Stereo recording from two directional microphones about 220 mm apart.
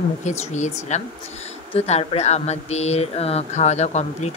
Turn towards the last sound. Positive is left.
turn(degrees=30)  # may be behind; listen again after turning